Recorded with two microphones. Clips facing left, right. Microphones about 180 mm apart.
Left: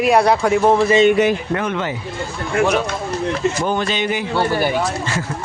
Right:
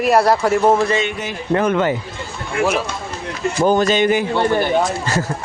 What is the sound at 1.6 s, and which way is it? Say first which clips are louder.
Speech: right 5 dB; 45° right (ahead or behind).